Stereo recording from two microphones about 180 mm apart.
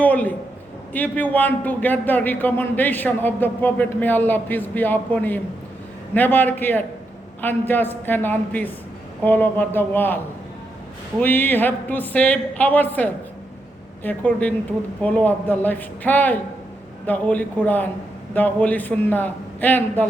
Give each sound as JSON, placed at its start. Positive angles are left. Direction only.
{"t": 0.0, "sound": "a man's voice", "side_deg": 10}
{"t": 11.2, "sound": "a man's voice", "side_deg": 10}